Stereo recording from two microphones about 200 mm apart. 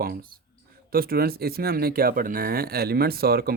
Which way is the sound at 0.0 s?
45° right (ahead or behind).